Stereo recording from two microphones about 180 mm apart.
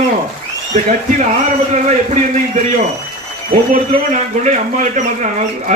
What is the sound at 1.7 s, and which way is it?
Speech, 40° right (ahead or behind).